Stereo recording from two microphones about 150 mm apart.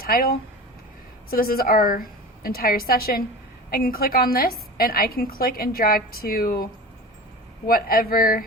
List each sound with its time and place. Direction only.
0.0 s a woman's voice: 80° left
3.7 s a woman's voice: 75° left (ahead or behind)
7.7 s speech: 80° left